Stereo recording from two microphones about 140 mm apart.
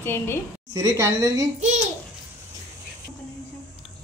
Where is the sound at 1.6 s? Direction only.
60° right (ahead or behind).